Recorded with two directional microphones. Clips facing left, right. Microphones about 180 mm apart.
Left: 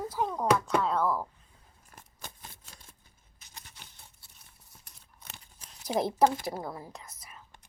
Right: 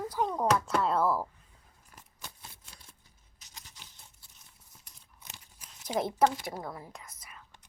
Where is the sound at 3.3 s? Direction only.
55° left (ahead or behind).